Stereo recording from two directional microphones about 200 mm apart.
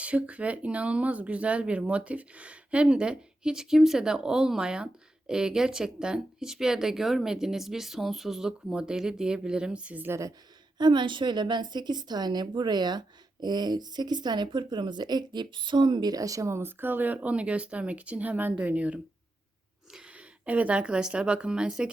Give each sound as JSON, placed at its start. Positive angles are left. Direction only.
{"t": 0.0, "sound": "a woman's voice", "side_deg": -5}